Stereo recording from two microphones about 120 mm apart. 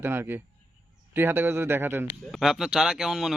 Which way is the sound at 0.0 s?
20° right (ahead or behind).